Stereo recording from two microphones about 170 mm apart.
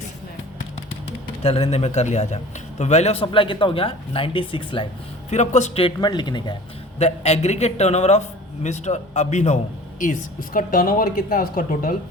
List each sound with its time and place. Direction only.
1.4 s a man's voice: 35° left (ahead or behind)
5.3 s a woman's voice: 45° left (ahead or behind)
6.0 s speech: 25° left (ahead or behind)
7.0 s a man's voice: 40° left (ahead or behind)